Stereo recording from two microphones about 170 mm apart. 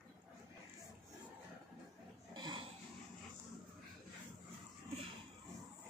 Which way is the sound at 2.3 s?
25° right (ahead or behind).